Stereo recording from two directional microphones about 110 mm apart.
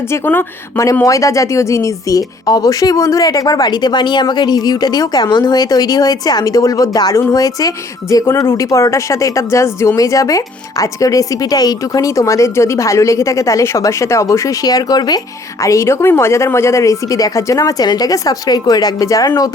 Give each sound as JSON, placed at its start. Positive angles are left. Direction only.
{"t": 0.1, "sound": "speech", "side_deg": 20}
{"t": 15.6, "sound": "speech", "side_deg": 25}